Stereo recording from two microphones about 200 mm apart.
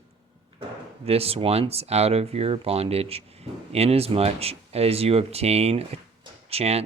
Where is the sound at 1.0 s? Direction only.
30° right (ahead or behind).